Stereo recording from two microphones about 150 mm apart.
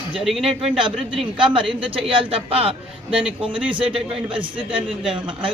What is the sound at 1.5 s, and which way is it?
A man's voice, 35° right (ahead or behind).